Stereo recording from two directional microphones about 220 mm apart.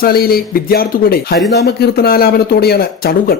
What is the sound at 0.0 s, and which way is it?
Speech, 45° left (ahead or behind).